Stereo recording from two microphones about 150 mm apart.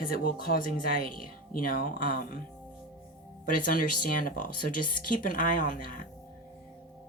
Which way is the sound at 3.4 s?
65° left (ahead or behind).